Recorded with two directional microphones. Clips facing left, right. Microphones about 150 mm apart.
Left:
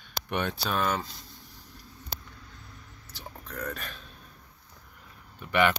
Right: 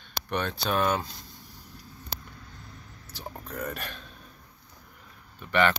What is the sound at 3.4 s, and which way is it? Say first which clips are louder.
Speech: right 1 dB; 5° right (ahead or behind).